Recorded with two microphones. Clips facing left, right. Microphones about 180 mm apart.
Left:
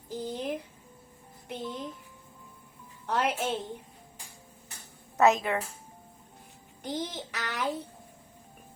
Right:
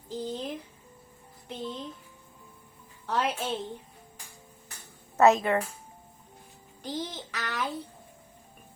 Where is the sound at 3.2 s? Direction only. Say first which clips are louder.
Left 1 dB; 15° left (ahead or behind).